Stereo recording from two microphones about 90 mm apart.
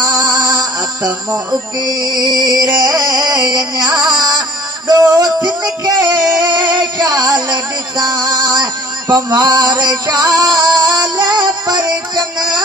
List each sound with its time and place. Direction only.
0.0 s music: 45° right (ahead or behind)